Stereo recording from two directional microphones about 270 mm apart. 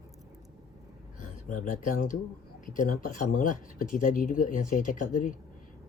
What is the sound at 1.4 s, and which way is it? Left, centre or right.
Speech, left.